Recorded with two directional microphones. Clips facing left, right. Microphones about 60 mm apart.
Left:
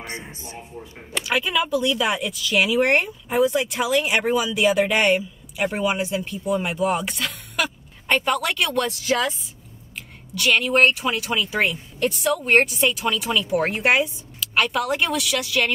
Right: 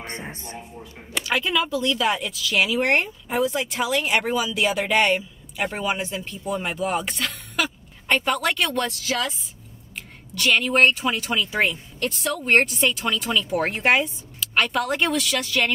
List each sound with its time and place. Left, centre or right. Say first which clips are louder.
0.3 s a man's voice: right 2 dB; right
0.6 s a man's voice: left 1 dB; centre